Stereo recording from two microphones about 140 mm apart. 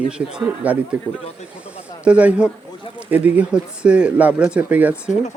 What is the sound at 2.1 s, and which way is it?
Speech, 10° right (ahead or behind).